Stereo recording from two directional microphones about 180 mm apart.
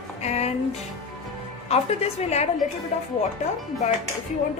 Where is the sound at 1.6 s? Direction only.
35° left (ahead or behind).